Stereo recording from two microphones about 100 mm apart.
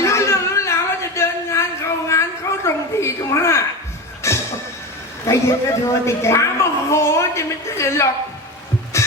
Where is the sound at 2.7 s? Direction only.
30° left (ahead or behind).